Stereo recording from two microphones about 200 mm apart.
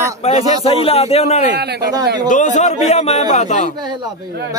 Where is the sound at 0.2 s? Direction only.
30° left (ahead or behind).